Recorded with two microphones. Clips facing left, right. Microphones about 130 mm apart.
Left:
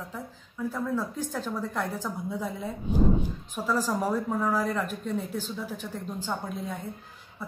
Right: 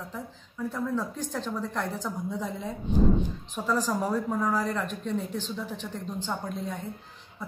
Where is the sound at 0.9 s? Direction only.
5° left (ahead or behind).